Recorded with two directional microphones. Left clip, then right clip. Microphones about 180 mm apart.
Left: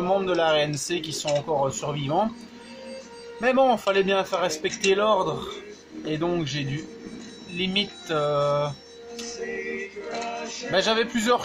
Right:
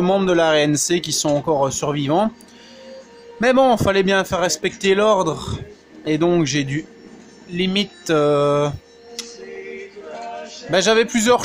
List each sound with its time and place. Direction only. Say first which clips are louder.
0.0 s speech: right 6 dB; 50° right (ahead or behind)
3.3 s speech: right 6 dB; 45° right (ahead or behind)
7.5 s music: right 5 dB; 45° right (ahead or behind)
10.7 s speech: right 7 dB; 50° right (ahead or behind)